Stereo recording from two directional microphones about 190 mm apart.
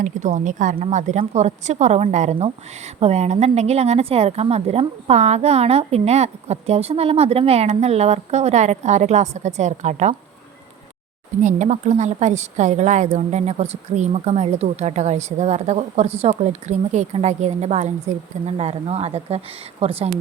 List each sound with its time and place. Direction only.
0.0 s speech: 40° right (ahead or behind)
11.4 s speech: 40° right (ahead or behind)